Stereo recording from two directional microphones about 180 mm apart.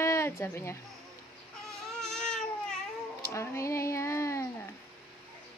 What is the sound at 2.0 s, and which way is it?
Baby cry, 5° left (ahead or behind).